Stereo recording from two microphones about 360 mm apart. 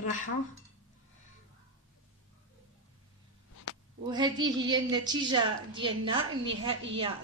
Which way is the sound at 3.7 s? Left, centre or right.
Left.